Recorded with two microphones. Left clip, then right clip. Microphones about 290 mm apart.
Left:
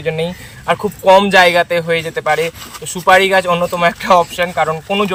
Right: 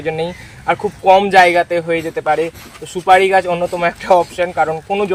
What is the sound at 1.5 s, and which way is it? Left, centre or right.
Speech, centre.